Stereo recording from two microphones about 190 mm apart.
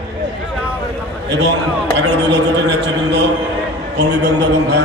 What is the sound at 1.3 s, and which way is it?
A man's voice, 65° right (ahead or behind).